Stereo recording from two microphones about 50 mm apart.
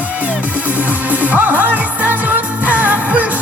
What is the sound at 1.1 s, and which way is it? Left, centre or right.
Music, right.